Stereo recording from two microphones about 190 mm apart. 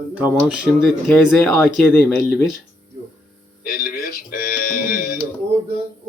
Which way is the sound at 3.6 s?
50° left (ahead or behind).